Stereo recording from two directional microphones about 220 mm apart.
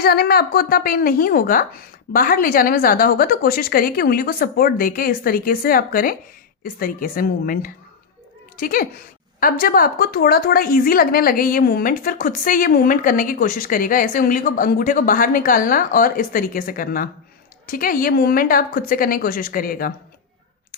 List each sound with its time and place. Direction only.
0.0 s a woman's voice: 45° left (ahead or behind)